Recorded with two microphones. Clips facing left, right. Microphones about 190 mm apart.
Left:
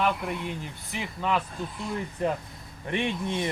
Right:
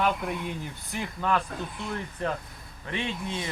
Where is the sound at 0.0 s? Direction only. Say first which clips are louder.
Even; centre (ahead or behind).